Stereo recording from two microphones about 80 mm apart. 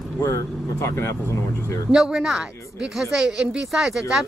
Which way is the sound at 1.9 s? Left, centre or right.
Centre.